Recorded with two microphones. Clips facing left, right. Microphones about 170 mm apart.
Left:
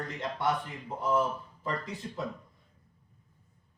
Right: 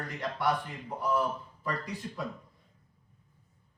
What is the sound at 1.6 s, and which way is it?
Speech, 25° left (ahead or behind).